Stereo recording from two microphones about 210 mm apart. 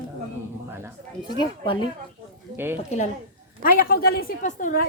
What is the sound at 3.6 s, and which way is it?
A woman's voice, 45° left (ahead or behind).